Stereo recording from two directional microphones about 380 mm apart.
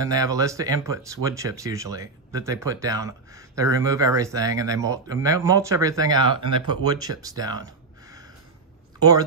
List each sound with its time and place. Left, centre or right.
0.0 s speech: centre